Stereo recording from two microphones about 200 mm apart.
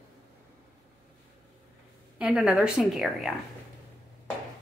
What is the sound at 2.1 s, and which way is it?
A woman's voice, 5° right (ahead or behind).